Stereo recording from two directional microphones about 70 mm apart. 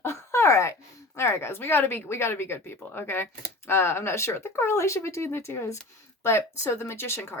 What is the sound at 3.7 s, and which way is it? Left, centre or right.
Speech, left.